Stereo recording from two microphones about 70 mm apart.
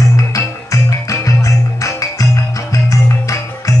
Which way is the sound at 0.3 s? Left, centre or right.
Left.